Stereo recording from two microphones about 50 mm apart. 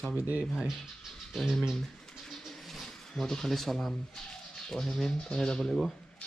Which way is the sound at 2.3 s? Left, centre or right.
Centre.